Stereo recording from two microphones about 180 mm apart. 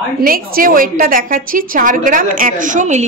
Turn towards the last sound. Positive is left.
turn(degrees=-40)  # may be behind; listen again after turning